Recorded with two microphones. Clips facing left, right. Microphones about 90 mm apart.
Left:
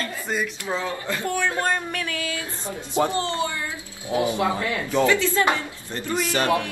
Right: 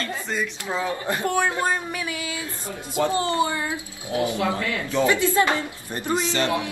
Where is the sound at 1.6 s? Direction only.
10° right (ahead or behind).